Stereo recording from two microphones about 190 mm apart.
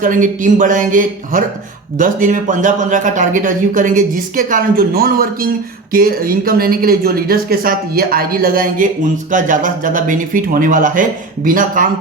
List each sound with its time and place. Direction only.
0.0 s speech: 45° right (ahead or behind)